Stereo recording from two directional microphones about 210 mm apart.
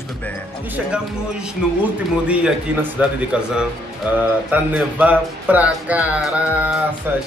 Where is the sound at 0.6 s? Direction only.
5° right (ahead or behind).